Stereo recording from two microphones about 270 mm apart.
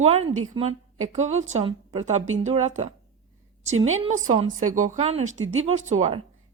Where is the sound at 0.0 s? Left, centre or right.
Right.